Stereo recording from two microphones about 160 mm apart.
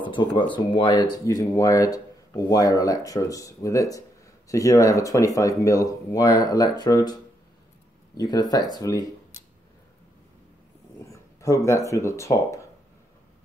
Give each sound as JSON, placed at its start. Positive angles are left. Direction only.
{"t": 0.0, "sound": "speech", "side_deg": 30}
{"t": 8.2, "sound": "speech", "side_deg": 25}
{"t": 11.1, "sound": "speech", "side_deg": 20}